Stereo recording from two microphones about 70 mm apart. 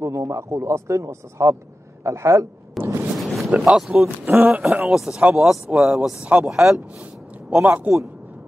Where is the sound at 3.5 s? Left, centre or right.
Centre.